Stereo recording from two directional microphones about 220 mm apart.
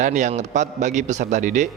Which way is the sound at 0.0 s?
35° right (ahead or behind).